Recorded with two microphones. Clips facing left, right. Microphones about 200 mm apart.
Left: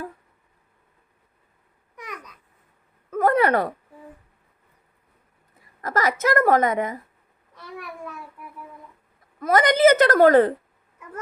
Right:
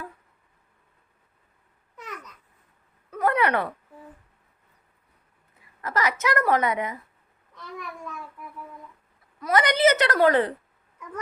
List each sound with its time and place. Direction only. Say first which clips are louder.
2.0 s babbling: left 1 dB; 15° left (ahead or behind)
3.1 s a sound: left 4 dB; 45° left (ahead or behind)
5.8 s a woman's voice: left 3 dB; 45° left (ahead or behind)
9.4 s a woman's voice: left 4 dB; 45° left (ahead or behind)